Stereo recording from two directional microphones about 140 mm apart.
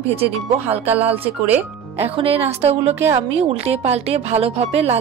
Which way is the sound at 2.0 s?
45° right (ahead or behind).